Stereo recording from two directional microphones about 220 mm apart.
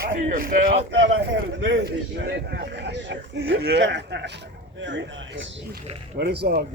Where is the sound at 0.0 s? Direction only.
40° right (ahead or behind).